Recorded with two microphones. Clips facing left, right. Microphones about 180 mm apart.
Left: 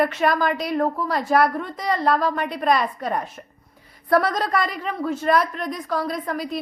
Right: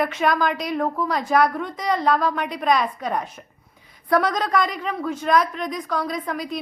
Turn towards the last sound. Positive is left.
turn(degrees=5)  # may be behind; listen again after turning